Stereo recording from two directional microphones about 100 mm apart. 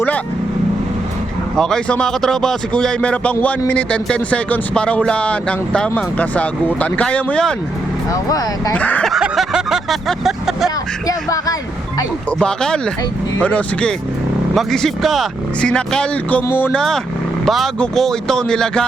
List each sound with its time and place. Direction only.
1.5 s speech: 5° left (ahead or behind)
8.1 s speech: 35° left (ahead or behind)
8.7 s speech: 15° left (ahead or behind)
9.0 s vehicle: 5° right (ahead or behind)
11.0 s speech: 35° left (ahead or behind)
12.4 s speech: 5° left (ahead or behind)
14.5 s speech: 5° left (ahead or behind)